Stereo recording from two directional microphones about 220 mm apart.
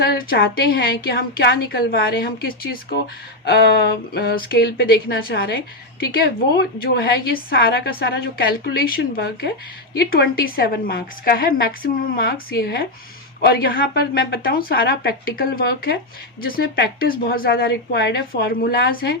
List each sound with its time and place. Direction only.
0.0 s a woman's voice: 50° left (ahead or behind)